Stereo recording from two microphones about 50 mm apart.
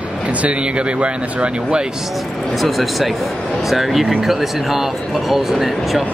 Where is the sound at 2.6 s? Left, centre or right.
Centre.